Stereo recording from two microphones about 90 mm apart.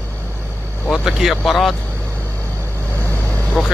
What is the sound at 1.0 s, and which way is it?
Speech, 5° right (ahead or behind).